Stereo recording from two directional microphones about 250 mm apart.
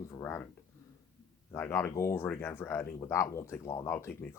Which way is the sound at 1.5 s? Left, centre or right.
Centre.